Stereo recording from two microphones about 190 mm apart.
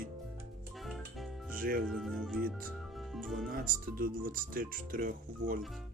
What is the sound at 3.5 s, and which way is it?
Speech, 50° right (ahead or behind).